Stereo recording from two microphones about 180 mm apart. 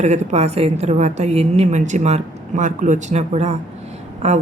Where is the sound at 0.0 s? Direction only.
40° right (ahead or behind).